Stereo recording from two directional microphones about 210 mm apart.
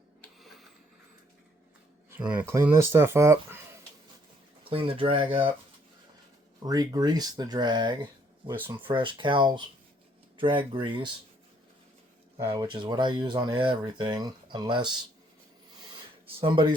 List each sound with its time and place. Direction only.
0.3 s a sound: centre (ahead or behind)
2.0 s speech: 10° right (ahead or behind)
4.6 s speech: 25° right (ahead or behind)
6.6 s speech: 15° right (ahead or behind)
8.4 s speech: 10° right (ahead or behind)
8.7 s speech: 25° right (ahead or behind)
12.5 s speech: 20° right (ahead or behind)
16.4 s speech: 20° right (ahead or behind)